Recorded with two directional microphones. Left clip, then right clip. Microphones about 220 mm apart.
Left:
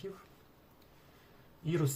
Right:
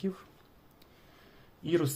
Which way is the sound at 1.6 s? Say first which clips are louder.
Right 6 dB; 40° right (ahead or behind).